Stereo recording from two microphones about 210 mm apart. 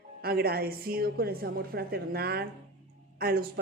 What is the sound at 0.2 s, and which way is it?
Speech, 50° right (ahead or behind).